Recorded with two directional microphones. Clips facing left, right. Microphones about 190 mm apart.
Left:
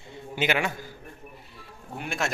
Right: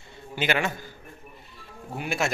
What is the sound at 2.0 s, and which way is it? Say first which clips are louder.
Speech: right 3 dB; 5° right (ahead or behind).